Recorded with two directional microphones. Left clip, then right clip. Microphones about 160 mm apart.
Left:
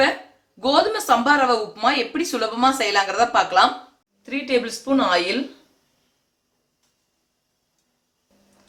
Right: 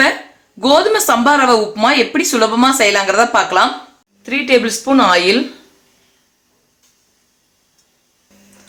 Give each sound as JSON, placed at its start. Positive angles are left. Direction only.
{"t": 0.6, "sound": "speech", "side_deg": -55}